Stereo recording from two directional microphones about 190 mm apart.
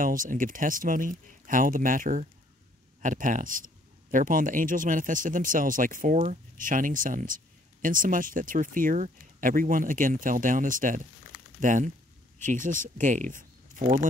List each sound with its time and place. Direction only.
0.0 s speech: 45° right (ahead or behind)